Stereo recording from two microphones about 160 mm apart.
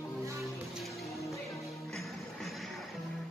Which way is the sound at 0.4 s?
Centre (ahead or behind).